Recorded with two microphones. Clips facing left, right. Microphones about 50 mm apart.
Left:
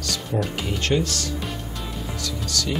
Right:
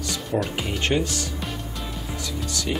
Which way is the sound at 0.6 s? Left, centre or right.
Centre.